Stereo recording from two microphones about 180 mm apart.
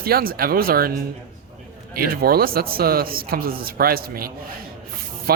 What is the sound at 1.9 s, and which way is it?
Speech, 55° right (ahead or behind).